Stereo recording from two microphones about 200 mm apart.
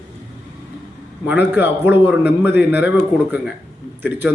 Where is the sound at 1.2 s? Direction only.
10° right (ahead or behind).